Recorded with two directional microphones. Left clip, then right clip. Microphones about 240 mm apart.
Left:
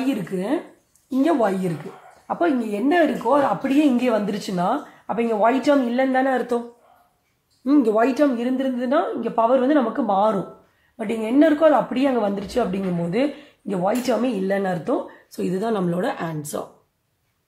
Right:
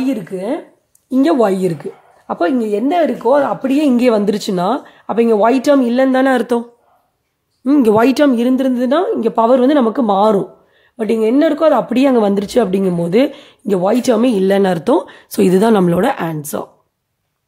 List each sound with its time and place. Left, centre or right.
0.0 s a woman's voice: right
7.6 s speech: right
7.9 s a woman's voice: right